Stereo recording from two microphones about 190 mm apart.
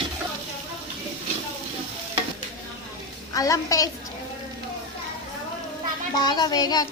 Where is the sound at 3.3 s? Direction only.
15° left (ahead or behind).